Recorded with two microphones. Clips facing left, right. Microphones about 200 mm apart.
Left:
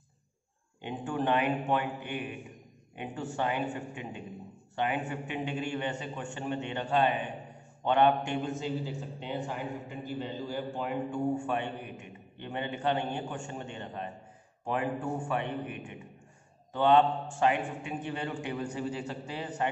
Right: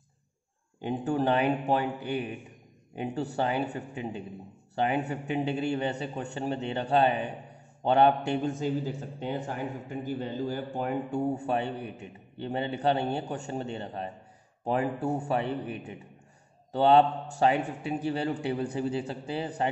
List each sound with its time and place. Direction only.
0.7 s a man's voice: 40° right (ahead or behind)